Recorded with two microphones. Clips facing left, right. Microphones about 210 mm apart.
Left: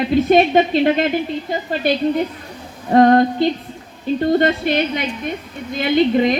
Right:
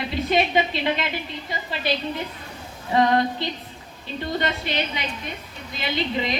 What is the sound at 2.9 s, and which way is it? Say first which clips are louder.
A woman's voice: left 8 dB; 50° left (ahead or behind).